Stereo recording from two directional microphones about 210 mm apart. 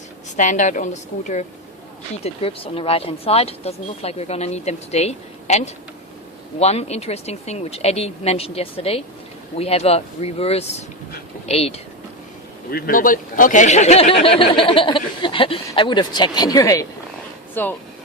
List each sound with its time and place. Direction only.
0.3 s a woman's voice: 35° left (ahead or behind)
2.2 s speech: 25° left (ahead or behind)
12.7 s speech: 45° left (ahead or behind); by 17.7 s 10° left (ahead or behind)